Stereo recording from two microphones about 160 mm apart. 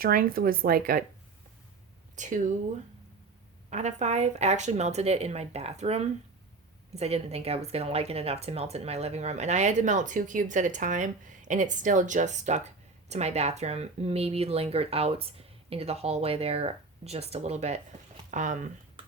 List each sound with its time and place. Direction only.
0.0 s speech: 65° right (ahead or behind)
2.1 s speech: 50° right (ahead or behind)
3.7 s speech: 45° right (ahead or behind)